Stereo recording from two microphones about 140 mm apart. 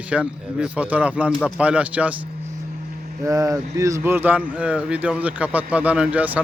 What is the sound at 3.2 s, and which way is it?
Speech, 20° right (ahead or behind).